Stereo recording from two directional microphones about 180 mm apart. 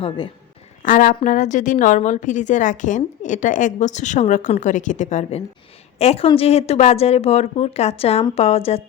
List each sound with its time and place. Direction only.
0.8 s a woman's voice: 45° left (ahead or behind)